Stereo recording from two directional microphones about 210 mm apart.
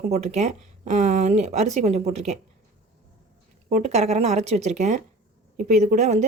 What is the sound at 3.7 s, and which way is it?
Speech, 30° right (ahead or behind).